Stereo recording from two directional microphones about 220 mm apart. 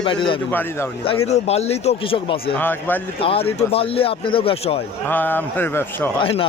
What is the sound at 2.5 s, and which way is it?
Speech, 10° left (ahead or behind).